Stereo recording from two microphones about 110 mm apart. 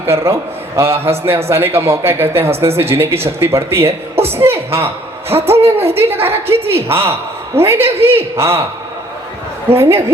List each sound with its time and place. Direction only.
0.0 s a woman's voice: 25° right (ahead or behind)
4.1 s a sound: 65° right (ahead or behind)
4.4 s a man's voice: 20° right (ahead or behind)
9.6 s a woman's voice: 20° right (ahead or behind)